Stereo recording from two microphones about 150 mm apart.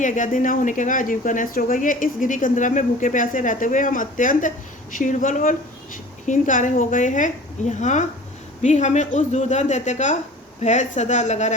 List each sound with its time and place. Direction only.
0.0 s speech: 60° left (ahead or behind)